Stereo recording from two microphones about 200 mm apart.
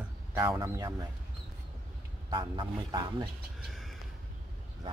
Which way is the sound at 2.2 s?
25° right (ahead or behind).